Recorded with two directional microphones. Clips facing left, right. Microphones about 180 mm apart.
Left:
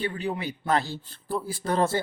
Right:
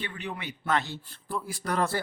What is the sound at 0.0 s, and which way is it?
Speech, 35° left (ahead or behind).